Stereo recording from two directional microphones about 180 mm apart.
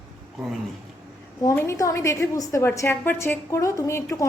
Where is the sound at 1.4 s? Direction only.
15° left (ahead or behind).